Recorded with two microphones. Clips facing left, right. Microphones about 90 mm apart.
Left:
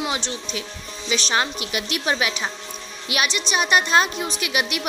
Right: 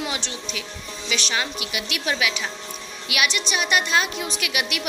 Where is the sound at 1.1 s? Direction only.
35° left (ahead or behind).